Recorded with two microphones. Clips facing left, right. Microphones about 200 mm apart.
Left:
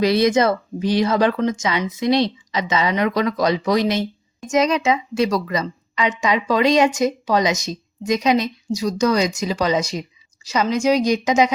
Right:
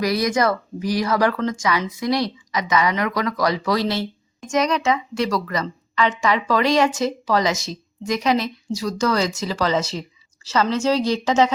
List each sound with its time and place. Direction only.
0.0 s speech: 25° left (ahead or behind)